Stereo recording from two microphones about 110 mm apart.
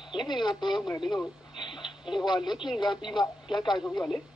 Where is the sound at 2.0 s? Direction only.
5° right (ahead or behind).